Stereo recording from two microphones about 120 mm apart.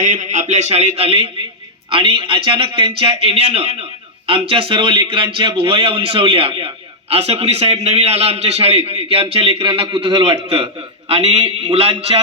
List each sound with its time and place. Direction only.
0.0 s a man's voice: 90° right; by 10.4 s 35° right (ahead or behind)
10.5 s a man's voice: 50° right (ahead or behind)